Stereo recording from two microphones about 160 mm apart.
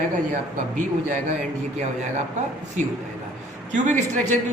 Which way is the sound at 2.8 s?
50° right (ahead or behind).